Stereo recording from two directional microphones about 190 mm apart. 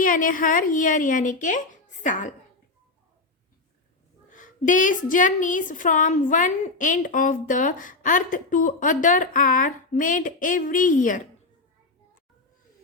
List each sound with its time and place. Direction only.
0.0 s a woman's voice: 45° left (ahead or behind)
4.3 s a woman's voice: 45° left (ahead or behind)